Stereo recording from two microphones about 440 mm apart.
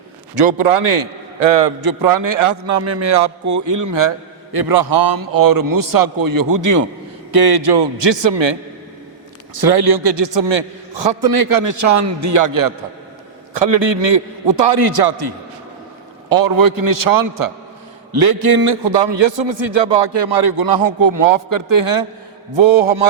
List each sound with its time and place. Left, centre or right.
0.3 s a man's voice: right
1.8 s a man's voice: right
7.3 s a man's voice: right
9.6 s a man's voice: right
13.5 s a man's voice: right
16.4 s a man's voice: right
20.2 s a man's voice: right
22.5 s a man's voice: right